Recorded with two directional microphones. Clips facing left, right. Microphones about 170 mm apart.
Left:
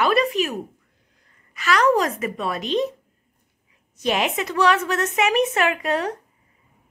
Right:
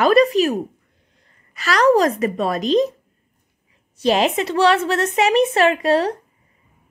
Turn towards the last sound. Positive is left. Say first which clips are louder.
# right 6 dB
turn(degrees=-35)  # may be behind; listen again after turning